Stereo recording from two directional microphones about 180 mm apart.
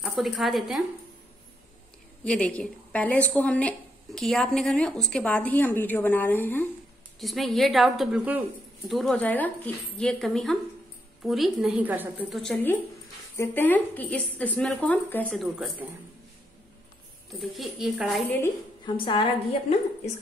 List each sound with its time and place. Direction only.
0.0 s speech: centre (ahead or behind)
2.2 s speech: 5° left (ahead or behind)
7.2 s speech: centre (ahead or behind)
12.4 s speech: 5° left (ahead or behind)
17.4 s speech: centre (ahead or behind)
18.9 s a woman's voice: 25° left (ahead or behind)